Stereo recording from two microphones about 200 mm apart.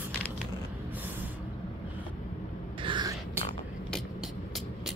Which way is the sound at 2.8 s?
25° right (ahead or behind).